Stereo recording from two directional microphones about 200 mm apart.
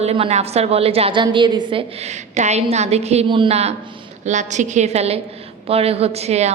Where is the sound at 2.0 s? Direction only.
35° right (ahead or behind).